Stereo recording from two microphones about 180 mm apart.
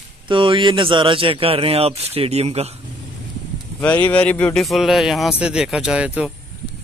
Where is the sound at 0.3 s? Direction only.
25° right (ahead or behind).